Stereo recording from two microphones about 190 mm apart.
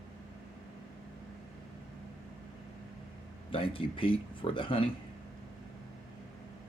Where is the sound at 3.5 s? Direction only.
30° left (ahead or behind).